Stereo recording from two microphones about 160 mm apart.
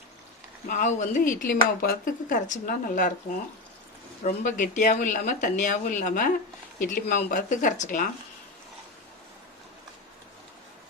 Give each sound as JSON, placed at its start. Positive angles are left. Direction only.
{"t": 0.7, "sound": "speech", "side_deg": 50}
{"t": 4.2, "sound": "speech", "side_deg": 55}